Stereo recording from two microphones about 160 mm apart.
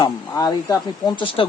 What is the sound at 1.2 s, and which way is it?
Speech, 35° left (ahead or behind).